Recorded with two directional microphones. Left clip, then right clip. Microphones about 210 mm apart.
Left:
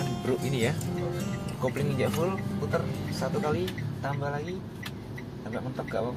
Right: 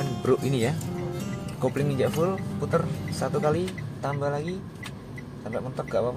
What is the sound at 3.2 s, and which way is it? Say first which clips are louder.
Speech: right 5 dB; 30° right (ahead or behind).